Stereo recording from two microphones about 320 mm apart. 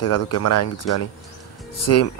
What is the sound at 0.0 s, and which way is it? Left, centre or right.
Speech, left.